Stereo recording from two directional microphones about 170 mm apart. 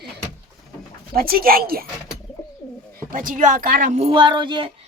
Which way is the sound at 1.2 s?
60° right (ahead or behind).